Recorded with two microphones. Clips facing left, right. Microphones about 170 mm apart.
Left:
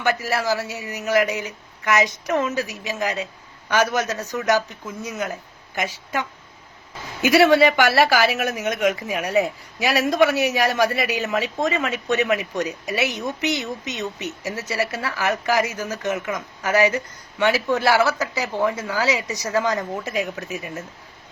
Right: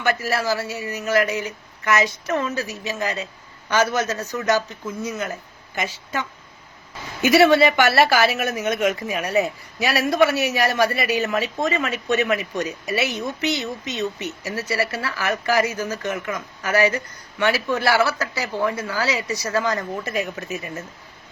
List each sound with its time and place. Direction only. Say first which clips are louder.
0.0 s a woman's voice: even; 15° left (ahead or behind)
9.0 s speech: even; centre (ahead or behind)
9.2 s a woman's voice: left 1 dB; 15° left (ahead or behind)
20.2 s speech: even; centre (ahead or behind)